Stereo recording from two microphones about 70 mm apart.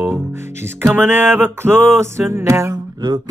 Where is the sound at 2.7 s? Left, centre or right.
Right.